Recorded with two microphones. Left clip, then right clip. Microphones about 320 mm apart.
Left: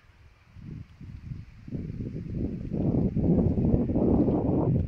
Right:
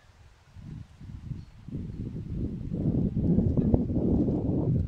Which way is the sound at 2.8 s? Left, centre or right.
Left.